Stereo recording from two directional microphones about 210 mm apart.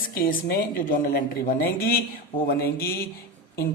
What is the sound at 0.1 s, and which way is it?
Speech, 45° left (ahead or behind).